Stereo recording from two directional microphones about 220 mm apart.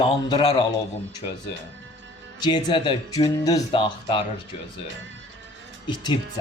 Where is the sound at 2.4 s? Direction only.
20° left (ahead or behind).